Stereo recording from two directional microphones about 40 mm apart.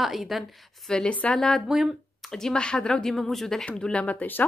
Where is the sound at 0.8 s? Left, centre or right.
Left.